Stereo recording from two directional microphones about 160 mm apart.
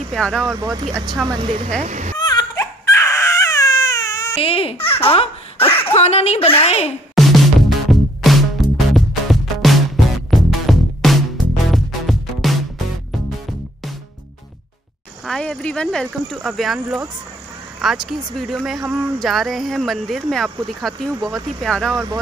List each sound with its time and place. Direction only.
0.1 s speech: 5° left (ahead or behind)
0.6 s speech: 20° right (ahead or behind)
1.8 s speech: 45° right (ahead or behind)
2.1 s baby cry: 25° left (ahead or behind)
4.4 s speech: 35° left (ahead or behind)
7.2 s music: centre (ahead or behind)
15.2 s speech: centre (ahead or behind)
21.1 s speech: 20° right (ahead or behind)
21.6 s speech: 5° left (ahead or behind)